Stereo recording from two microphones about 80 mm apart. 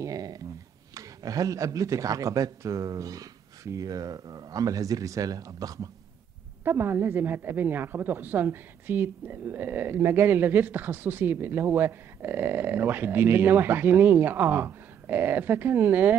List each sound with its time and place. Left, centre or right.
0.0 s a sound: right
0.9 s speech: right
6.6 s a woman's voice: right